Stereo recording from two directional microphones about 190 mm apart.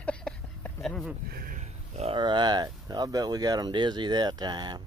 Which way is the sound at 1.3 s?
45° right (ahead or behind).